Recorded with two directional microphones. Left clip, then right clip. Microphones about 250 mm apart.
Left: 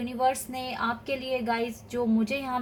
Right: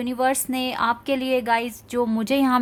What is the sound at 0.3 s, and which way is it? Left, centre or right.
A woman's voice, right.